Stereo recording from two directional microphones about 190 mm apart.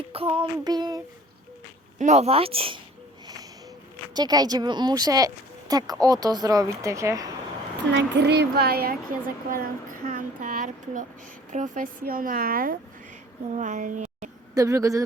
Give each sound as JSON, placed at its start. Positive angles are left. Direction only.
{"t": 0.1, "sound": "child singing", "side_deg": -30}
{"t": 2.0, "sound": "speech", "side_deg": -35}
{"t": 4.1, "sound": "speech", "side_deg": -20}
{"t": 7.9, "sound": "speech", "side_deg": -65}
{"t": 14.5, "sound": "speech", "side_deg": -15}